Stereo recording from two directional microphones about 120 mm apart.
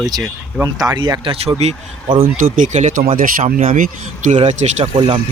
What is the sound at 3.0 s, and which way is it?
Speech, 55° right (ahead or behind).